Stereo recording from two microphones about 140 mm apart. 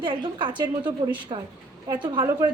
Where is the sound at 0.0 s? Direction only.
35° right (ahead or behind).